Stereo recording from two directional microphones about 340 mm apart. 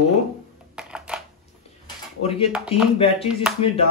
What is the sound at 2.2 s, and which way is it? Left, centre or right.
Speech, centre.